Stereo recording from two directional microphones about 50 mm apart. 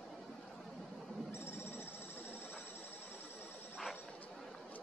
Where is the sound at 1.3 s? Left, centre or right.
Left.